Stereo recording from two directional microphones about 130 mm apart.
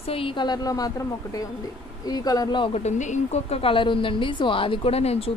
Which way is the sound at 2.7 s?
60° left (ahead or behind).